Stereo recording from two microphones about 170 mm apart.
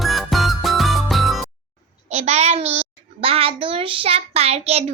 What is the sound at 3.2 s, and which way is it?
Child singing, 35° right (ahead or behind).